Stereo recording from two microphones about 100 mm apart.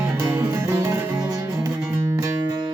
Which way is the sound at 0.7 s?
30° right (ahead or behind).